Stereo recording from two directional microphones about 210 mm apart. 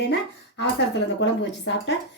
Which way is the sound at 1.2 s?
55° left (ahead or behind).